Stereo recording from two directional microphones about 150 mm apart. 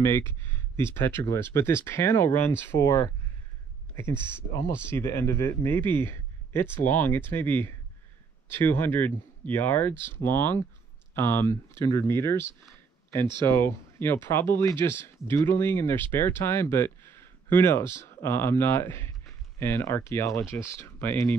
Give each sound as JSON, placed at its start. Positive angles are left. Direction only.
{"t": 0.0, "sound": "speech", "side_deg": 15}
{"t": 13.5, "sound": "speech", "side_deg": 15}